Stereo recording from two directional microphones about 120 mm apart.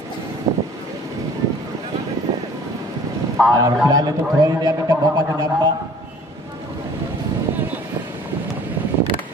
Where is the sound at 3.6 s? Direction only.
30° right (ahead or behind).